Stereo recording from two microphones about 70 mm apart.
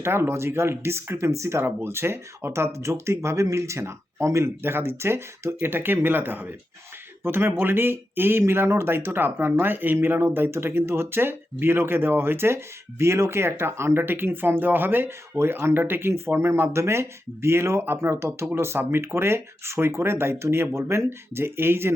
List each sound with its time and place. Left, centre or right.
0.0 s speech: right